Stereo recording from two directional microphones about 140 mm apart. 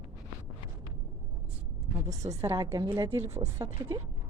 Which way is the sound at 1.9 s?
25° right (ahead or behind).